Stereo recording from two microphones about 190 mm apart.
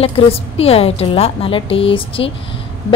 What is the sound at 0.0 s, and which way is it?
A woman's voice, 30° left (ahead or behind).